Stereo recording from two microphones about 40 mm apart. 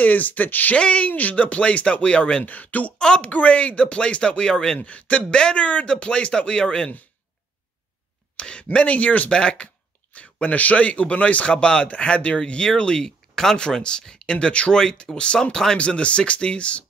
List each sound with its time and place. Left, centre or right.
0.0 s speech: left
0.7 s speech: left
2.4 s speech: left
3.2 s speech: left; by 4.7 s centre
4.7 s speech: left
5.2 s speech: left
8.4 s speech: left
9.3 s speech: left
10.1 s speech: left
13.3 s speech: centre
15.8 s speech: left